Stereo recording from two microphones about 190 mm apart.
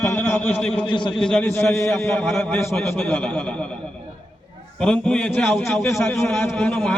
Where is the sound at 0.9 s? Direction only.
25° left (ahead or behind).